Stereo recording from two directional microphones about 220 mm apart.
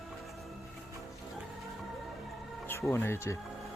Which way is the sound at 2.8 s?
10° left (ahead or behind).